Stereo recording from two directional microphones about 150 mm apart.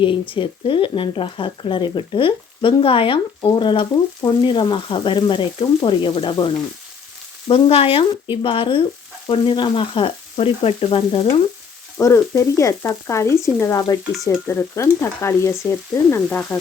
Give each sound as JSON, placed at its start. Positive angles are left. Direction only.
{"t": 0.0, "sound": "speech", "side_deg": 35}
{"t": 11.9, "sound": "frying", "side_deg": 20}
{"t": 14.3, "sound": "stir", "side_deg": 15}